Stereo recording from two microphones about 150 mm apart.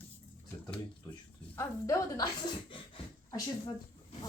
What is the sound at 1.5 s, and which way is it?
Speech, 20° left (ahead or behind).